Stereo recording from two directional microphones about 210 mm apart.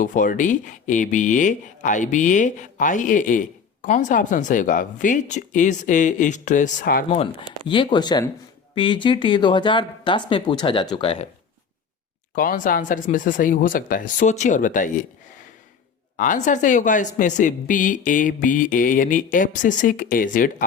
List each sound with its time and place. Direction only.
0.0 s speech: 40° left (ahead or behind)
7.7 s speech: 20° left (ahead or behind)
12.3 s speech: 40° left (ahead or behind)
16.1 s speech: 40° left (ahead or behind)